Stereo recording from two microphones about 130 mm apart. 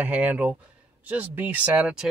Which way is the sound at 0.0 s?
10° right (ahead or behind).